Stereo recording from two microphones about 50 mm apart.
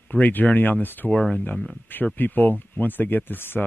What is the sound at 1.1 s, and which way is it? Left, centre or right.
Speech, centre.